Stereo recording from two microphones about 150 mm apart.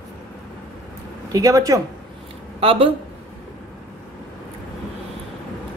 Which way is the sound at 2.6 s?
40° right (ahead or behind).